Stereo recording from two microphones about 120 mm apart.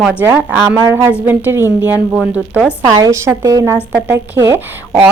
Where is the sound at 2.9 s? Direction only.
25° right (ahead or behind).